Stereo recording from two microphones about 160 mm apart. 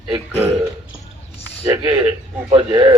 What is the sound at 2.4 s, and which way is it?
Speech, 30° right (ahead or behind).